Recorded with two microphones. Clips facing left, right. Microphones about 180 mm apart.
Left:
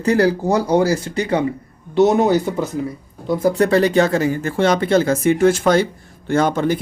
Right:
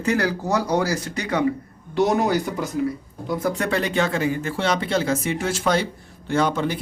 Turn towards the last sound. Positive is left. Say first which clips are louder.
# left 5 dB
turn(degrees=45)  # may be behind; listen again after turning